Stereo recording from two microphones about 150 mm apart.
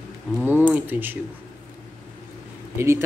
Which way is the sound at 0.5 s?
10° right (ahead or behind).